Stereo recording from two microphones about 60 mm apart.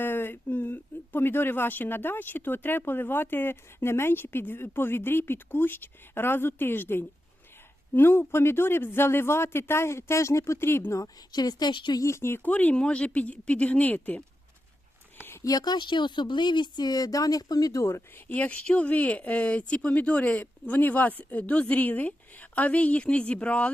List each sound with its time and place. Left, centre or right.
0.0 s speech: left
10.9 s a woman's voice: left
12.0 s speech: left
12.4 s speech: left
15.2 s a sound: left
16.9 s speech: left
17.7 s speech: left
18.3 s speech: left